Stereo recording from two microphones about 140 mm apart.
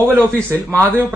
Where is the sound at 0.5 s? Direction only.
20° right (ahead or behind).